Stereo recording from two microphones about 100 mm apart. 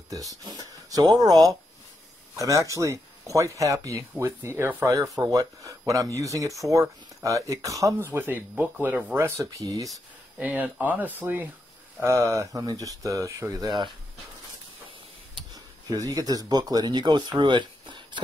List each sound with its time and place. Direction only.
0.1 s speech: 35° right (ahead or behind)
8.1 s speech: 20° right (ahead or behind)
10.4 s speech: 15° right (ahead or behind)
12.0 s speech: 30° right (ahead or behind); by 13.9 s 50° right (ahead or behind)
15.5 s speech: 40° right (ahead or behind)